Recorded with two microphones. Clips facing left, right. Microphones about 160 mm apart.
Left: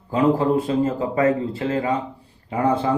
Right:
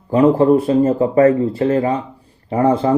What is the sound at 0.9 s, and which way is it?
Speech, 35° right (ahead or behind).